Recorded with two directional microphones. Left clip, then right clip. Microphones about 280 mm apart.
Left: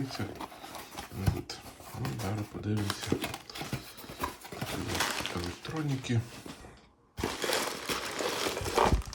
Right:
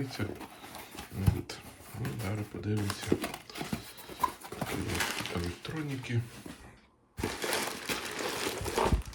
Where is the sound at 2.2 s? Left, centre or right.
Centre.